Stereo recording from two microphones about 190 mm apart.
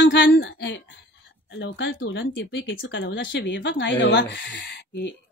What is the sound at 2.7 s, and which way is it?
Speech, 65° left (ahead or behind).